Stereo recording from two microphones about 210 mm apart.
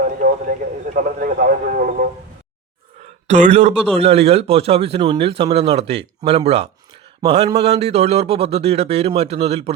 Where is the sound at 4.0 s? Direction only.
30° right (ahead or behind).